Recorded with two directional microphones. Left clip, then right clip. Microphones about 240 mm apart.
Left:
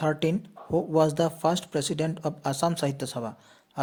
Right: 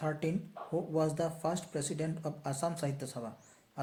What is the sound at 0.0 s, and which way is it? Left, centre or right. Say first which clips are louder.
Speech: left 9 dB; left.